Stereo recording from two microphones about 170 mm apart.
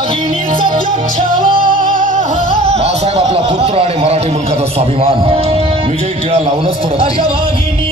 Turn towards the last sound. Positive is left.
turn(degrees=-35)  # may be behind; listen again after turning